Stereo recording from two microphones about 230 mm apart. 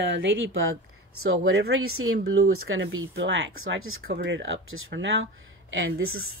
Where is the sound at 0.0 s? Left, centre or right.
Right.